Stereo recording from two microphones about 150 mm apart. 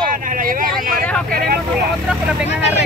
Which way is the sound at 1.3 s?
90° right.